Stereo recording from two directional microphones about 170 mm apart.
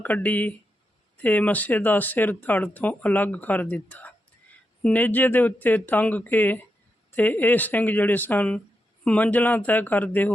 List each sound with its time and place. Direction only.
0.0 s speech: 10° left (ahead or behind)